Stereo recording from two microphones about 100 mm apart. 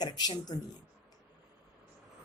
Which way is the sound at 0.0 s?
45° left (ahead or behind).